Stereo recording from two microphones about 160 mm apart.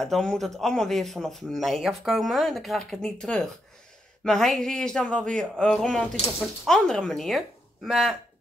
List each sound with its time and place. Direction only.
0.0 s speech: 5° left (ahead or behind)